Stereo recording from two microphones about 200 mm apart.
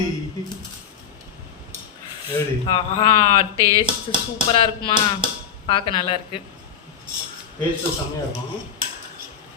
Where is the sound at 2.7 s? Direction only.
25° left (ahead or behind).